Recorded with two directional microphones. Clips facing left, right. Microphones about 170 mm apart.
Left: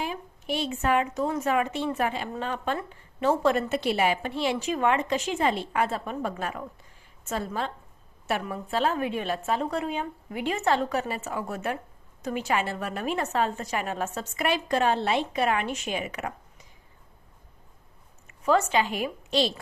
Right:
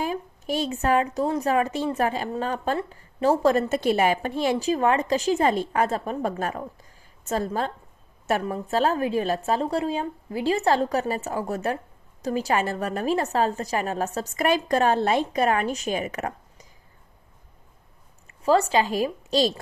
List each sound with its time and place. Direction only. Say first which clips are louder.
0.0 s a woman's voice: right 5 dB; 40° right (ahead or behind)
18.4 s a woman's voice: right 3 dB; 35° right (ahead or behind)